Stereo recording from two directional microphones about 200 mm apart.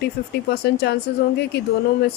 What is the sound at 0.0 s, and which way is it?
A woman's voice, 55° left (ahead or behind).